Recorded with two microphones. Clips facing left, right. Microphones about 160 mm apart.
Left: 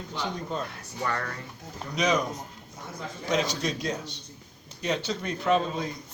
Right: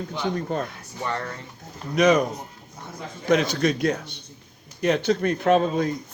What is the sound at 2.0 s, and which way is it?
Speech, 55° right (ahead or behind).